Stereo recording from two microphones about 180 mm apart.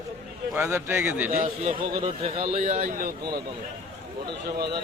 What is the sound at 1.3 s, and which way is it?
A man's voice, 40° right (ahead or behind).